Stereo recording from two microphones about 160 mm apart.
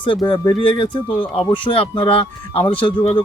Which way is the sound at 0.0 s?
30° left (ahead or behind).